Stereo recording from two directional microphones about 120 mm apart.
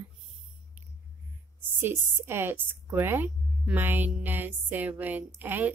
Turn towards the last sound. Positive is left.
turn(degrees=-15)  # may be behind; listen again after turning